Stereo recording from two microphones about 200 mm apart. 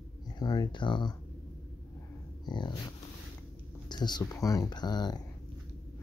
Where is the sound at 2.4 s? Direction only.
20° left (ahead or behind).